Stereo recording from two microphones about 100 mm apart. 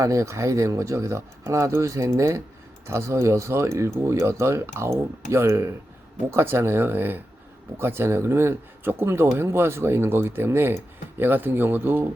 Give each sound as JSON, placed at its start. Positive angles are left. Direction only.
{"t": 0.0, "sound": "speech", "side_deg": -30}